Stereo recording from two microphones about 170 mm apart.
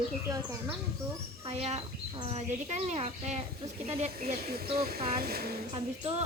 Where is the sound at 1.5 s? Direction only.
40° right (ahead or behind).